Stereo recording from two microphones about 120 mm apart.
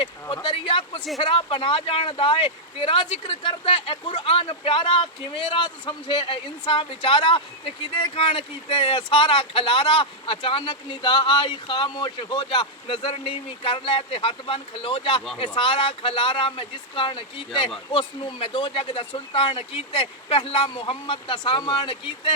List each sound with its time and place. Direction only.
0.4 s speech: 45° left (ahead or behind)